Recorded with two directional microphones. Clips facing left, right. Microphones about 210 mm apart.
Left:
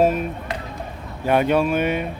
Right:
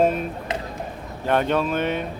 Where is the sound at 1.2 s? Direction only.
10° left (ahead or behind).